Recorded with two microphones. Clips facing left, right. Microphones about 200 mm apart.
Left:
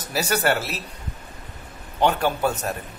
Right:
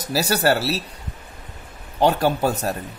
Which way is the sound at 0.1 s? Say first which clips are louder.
Right 3 dB; 35° right (ahead or behind).